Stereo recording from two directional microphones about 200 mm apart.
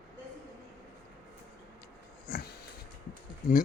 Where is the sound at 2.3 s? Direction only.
50° left (ahead or behind).